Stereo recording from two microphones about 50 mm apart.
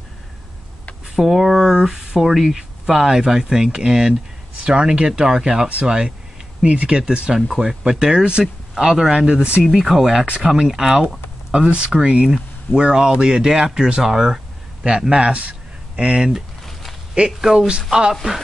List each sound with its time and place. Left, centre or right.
1.0 s speech: centre
7.3 s speech: centre
9.6 s speech: centre
11.5 s speech: right